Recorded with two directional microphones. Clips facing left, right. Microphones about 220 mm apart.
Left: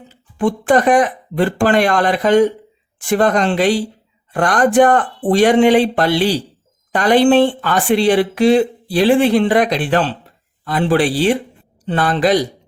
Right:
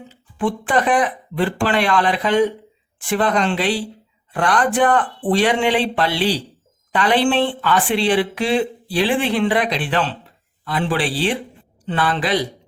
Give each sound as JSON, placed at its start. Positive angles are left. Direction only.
{"t": 0.3, "sound": "speech", "side_deg": 45}